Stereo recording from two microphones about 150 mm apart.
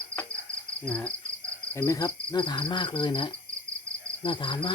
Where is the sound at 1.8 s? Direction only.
25° left (ahead or behind).